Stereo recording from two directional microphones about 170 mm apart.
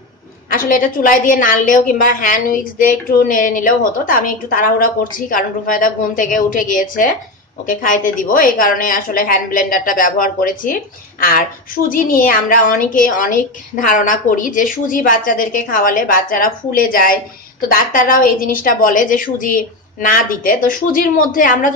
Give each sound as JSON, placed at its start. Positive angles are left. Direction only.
{"t": 0.5, "sound": "a woman's voice", "side_deg": 55}
{"t": 11.9, "sound": "a woman's voice", "side_deg": 55}